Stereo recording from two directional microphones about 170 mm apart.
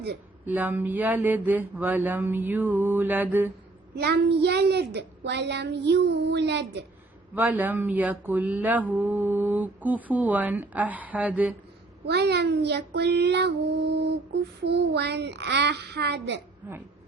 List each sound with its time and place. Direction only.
0.4 s speech: 10° right (ahead or behind)
3.9 s a woman's voice: 75° right (ahead or behind)
7.3 s speech: 10° right (ahead or behind)
12.0 s child singing: 75° right (ahead or behind)
16.6 s speech: 10° right (ahead or behind)